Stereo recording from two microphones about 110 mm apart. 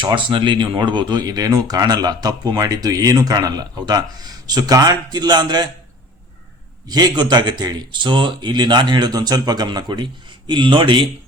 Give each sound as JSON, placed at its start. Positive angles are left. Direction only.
{"t": 0.0, "sound": "speech", "side_deg": -45}
{"t": 6.8, "sound": "speech", "side_deg": -40}